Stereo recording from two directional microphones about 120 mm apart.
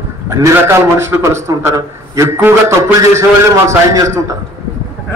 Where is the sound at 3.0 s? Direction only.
25° right (ahead or behind).